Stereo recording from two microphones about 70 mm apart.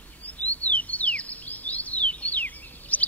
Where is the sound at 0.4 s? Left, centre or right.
Left.